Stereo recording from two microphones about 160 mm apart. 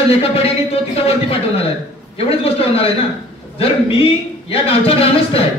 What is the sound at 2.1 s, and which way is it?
Speech, 40° left (ahead or behind).